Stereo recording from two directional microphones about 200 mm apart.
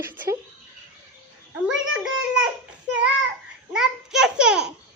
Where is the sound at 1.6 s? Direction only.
5° right (ahead or behind).